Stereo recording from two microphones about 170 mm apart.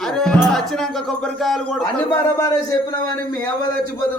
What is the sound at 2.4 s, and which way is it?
Speech, 20° left (ahead or behind).